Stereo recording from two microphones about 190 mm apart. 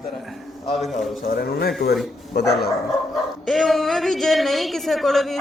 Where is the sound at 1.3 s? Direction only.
55° left (ahead or behind).